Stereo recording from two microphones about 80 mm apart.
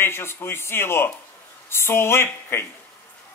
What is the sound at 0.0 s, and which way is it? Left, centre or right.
A man's voice, left.